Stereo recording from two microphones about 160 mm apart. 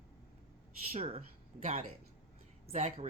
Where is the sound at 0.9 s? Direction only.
40° right (ahead or behind).